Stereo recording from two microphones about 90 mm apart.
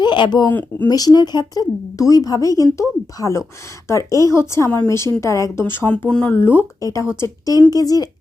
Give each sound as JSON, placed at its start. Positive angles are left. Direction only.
{"t": 0.0, "sound": "speech", "side_deg": 60}
{"t": 0.5, "sound": "speech", "side_deg": 20}
{"t": 0.9, "sound": "speech", "side_deg": 45}
{"t": 6.1, "sound": "speech", "side_deg": 10}
{"t": 6.3, "sound": "speech", "side_deg": 25}